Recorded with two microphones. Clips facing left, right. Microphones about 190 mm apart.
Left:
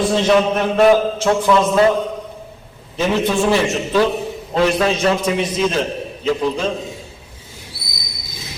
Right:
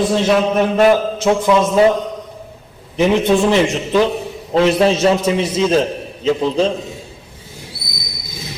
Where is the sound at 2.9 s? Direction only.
15° right (ahead or behind).